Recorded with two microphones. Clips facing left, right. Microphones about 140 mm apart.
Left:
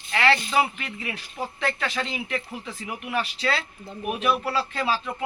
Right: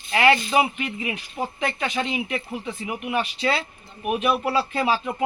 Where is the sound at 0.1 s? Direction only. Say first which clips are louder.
Right 3 dB; 15° right (ahead or behind).